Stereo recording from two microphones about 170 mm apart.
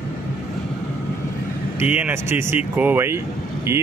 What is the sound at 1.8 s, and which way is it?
Speech, 10° right (ahead or behind).